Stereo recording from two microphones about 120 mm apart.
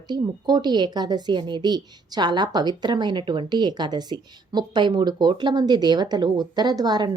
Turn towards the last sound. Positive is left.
turn(degrees=-35)  # may be behind; listen again after turning